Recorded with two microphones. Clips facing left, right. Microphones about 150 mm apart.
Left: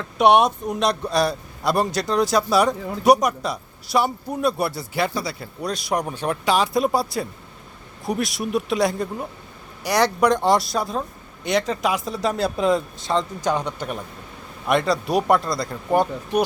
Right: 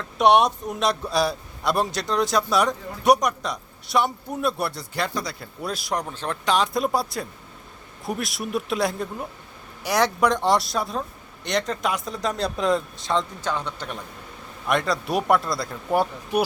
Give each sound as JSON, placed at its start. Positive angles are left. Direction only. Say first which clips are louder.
{"t": 0.2, "sound": "a man's voice", "louder": "left 2 dB", "side_deg": 0}
{"t": 5.9, "sound": "a man's voice", "louder": "left 5 dB", "side_deg": 10}
{"t": 13.4, "sound": "a man's voice", "louder": "left 5 dB", "side_deg": 15}